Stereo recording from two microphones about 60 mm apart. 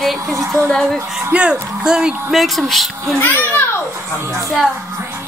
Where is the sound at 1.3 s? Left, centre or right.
Centre.